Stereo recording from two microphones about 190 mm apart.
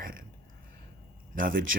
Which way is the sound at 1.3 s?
45° right (ahead or behind).